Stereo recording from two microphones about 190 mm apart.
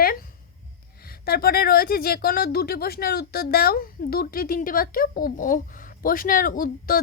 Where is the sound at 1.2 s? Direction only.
50° left (ahead or behind).